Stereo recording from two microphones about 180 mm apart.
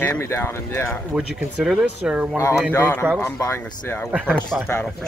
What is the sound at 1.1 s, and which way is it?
Speech, 5° right (ahead or behind).